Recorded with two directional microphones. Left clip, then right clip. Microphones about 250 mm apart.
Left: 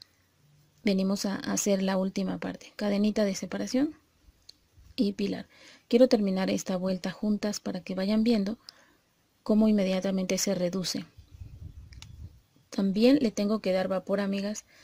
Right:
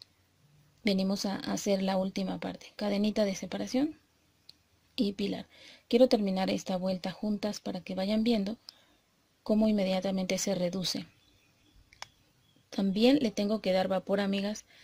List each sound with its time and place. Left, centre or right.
0.8 s a woman's voice: centre
4.9 s a woman's voice: centre
12.6 s a woman's voice: centre